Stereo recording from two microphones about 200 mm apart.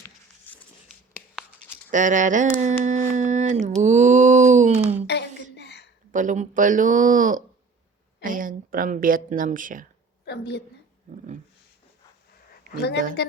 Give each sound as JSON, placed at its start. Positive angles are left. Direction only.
{"t": 1.9, "sound": "a sound", "side_deg": -40}
{"t": 5.0, "sound": "a sound", "side_deg": 60}
{"t": 6.1, "sound": "speech", "side_deg": -40}
{"t": 10.2, "sound": "a woman's voice", "side_deg": 55}
{"t": 11.1, "sound": "speech", "side_deg": -40}
{"t": 12.7, "sound": "a woman's voice", "side_deg": 55}